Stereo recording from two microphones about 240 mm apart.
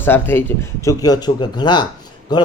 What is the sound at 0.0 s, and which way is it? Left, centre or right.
A man's voice, centre.